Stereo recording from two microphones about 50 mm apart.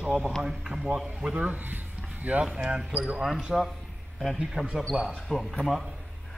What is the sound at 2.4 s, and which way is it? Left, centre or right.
A man's voice, centre.